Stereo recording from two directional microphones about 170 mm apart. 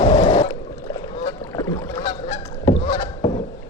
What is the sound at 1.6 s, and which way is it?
Rowboat, 20° left (ahead or behind).